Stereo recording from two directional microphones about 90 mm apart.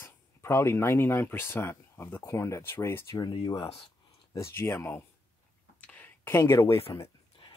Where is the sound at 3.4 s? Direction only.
45° left (ahead or behind).